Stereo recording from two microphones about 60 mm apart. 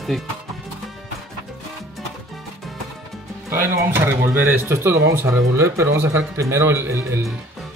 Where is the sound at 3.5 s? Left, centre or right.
Right.